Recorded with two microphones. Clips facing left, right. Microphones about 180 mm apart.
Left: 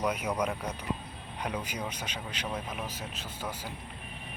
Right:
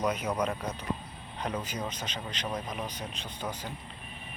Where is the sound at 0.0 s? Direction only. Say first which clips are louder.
Right 1 dB; 10° left (ahead or behind).